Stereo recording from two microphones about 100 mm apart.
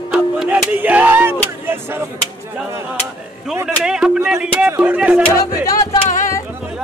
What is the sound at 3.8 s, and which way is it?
Music, 5° right (ahead or behind).